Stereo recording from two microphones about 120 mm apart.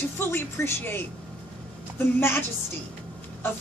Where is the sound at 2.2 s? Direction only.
20° left (ahead or behind).